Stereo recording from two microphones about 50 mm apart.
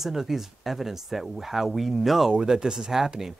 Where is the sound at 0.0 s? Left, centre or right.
Centre.